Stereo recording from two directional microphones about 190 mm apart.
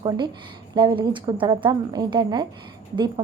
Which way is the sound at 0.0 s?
20° right (ahead or behind).